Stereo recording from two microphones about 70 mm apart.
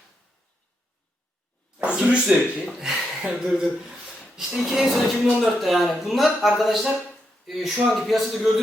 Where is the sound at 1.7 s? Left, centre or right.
Centre.